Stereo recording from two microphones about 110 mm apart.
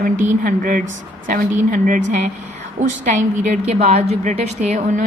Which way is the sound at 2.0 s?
90° right.